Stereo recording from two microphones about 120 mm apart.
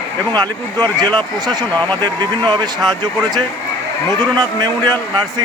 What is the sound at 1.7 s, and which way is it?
Speech, 15° left (ahead or behind).